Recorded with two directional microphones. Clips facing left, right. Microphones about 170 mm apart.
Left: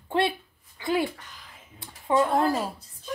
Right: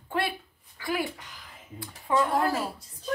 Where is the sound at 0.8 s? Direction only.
25° left (ahead or behind).